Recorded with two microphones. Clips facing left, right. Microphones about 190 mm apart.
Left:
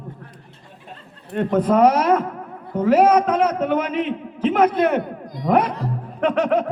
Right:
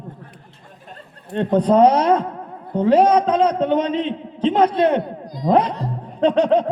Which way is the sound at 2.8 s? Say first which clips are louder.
Right 1 dB; 30° right (ahead or behind).